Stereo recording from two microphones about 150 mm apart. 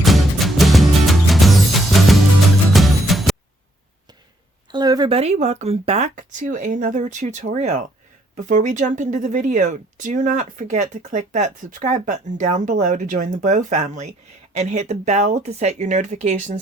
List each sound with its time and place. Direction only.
0.0 s music: centre (ahead or behind)
4.7 s a sound: 30° right (ahead or behind)
5.1 s speech: 45° right (ahead or behind)
6.1 s speech: 60° right (ahead or behind)